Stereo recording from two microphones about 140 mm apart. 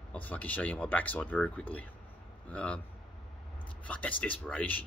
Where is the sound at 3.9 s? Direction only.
10° left (ahead or behind).